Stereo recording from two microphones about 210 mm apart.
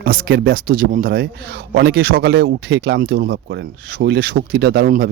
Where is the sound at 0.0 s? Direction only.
45° right (ahead or behind).